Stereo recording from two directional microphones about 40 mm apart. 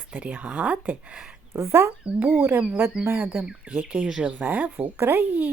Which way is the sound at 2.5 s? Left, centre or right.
Right.